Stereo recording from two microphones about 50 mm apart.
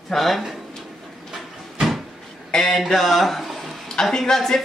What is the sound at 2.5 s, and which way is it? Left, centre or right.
A man's voice, centre.